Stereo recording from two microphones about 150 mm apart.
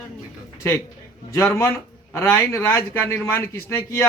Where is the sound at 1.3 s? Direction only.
20° left (ahead or behind).